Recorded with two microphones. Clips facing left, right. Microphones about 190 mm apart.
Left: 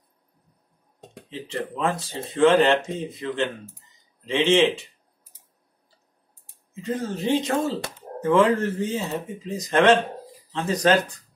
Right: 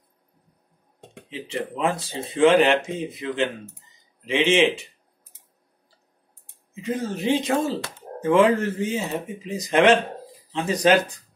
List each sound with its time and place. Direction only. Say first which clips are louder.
1.3 s speech: right 1 dB; 15° right (ahead or behind)
6.7 s speech: right 1 dB; 15° right (ahead or behind)